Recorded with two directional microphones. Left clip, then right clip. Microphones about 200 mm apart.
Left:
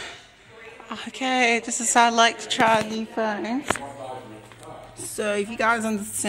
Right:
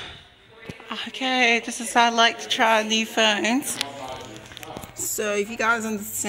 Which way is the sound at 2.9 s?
20° right (ahead or behind).